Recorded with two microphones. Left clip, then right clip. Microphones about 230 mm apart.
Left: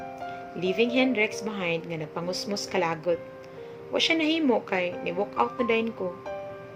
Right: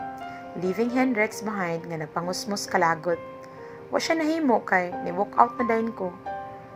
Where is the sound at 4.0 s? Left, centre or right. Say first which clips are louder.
Even; centre.